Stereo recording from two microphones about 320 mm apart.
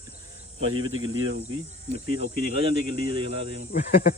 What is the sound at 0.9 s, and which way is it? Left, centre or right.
Speech, right.